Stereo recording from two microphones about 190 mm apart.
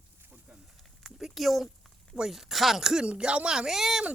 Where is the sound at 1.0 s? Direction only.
Centre (ahead or behind).